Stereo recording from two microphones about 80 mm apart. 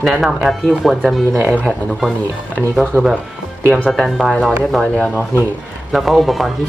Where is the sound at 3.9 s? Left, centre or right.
Centre.